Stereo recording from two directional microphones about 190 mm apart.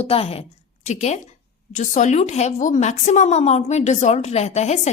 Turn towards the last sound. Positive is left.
turn(degrees=35)  # may be behind; listen again after turning